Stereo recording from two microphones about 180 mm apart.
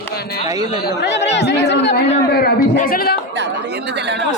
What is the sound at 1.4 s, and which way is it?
Chatter, 70° left (ahead or behind).